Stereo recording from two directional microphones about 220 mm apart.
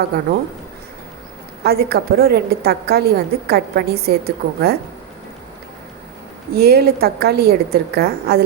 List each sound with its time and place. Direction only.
1.6 s a woman's voice: 45° right (ahead or behind)
6.5 s a woman's voice: 45° right (ahead or behind)